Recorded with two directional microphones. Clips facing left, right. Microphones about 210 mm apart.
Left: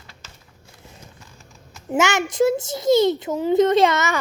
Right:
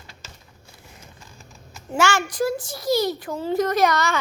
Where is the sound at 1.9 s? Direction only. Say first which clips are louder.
Left 2 dB; 20° left (ahead or behind).